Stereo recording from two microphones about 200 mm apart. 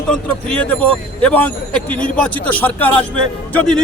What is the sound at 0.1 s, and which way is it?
A man's voice, 5° left (ahead or behind).